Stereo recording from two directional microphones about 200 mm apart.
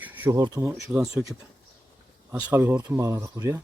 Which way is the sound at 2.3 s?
10° right (ahead or behind).